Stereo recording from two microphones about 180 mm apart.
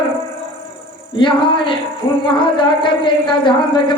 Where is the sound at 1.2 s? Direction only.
25° left (ahead or behind).